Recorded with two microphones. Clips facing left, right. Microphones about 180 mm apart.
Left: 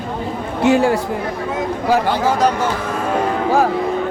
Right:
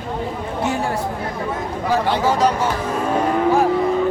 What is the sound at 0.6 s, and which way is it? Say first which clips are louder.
Speech: left 9 dB; 80° left.